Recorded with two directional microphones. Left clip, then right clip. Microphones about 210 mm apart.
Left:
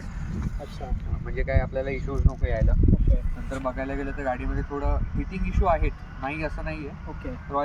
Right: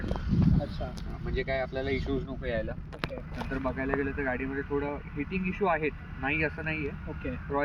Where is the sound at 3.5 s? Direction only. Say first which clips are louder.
Left 1 dB; 20° left (ahead or behind).